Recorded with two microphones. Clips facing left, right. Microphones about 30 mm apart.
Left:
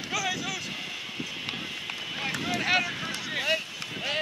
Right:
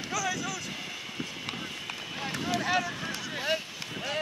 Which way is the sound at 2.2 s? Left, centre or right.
Left.